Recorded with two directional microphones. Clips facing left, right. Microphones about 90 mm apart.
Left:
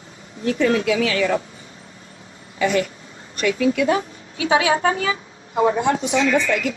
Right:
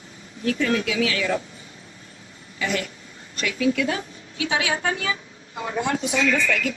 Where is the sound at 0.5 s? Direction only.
35° left (ahead or behind).